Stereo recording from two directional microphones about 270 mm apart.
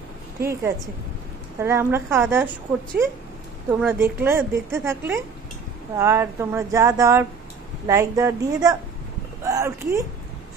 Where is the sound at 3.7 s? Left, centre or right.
Centre.